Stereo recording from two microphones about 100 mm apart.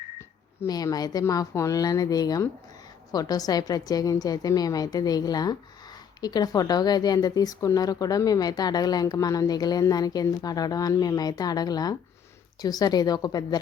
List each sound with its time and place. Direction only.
0.7 s speech: 40° left (ahead or behind)